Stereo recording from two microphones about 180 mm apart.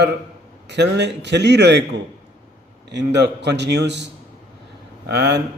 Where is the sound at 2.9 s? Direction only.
70° right (ahead or behind).